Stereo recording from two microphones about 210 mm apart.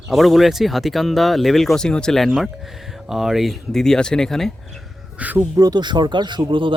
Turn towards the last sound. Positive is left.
turn(degrees=-25)  # may be behind; listen again after turning